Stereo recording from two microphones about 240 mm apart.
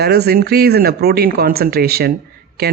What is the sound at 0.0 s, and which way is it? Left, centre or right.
A man's voice, right.